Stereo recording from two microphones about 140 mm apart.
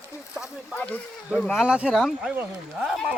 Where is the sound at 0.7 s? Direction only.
10° left (ahead or behind).